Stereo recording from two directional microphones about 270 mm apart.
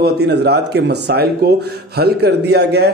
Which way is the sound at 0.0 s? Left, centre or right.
Right.